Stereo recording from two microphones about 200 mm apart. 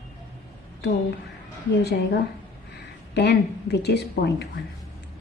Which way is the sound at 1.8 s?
55° left (ahead or behind).